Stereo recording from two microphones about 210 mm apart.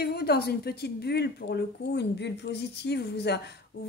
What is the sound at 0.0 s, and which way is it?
A woman's voice, 50° left (ahead or behind).